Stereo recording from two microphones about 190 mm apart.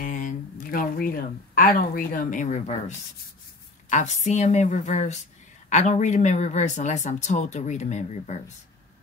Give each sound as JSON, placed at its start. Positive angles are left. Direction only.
{"t": 0.0, "sound": "a sound", "side_deg": 45}
{"t": 1.8, "sound": "a woman's voice", "side_deg": 50}
{"t": 3.9, "sound": "speech", "side_deg": 40}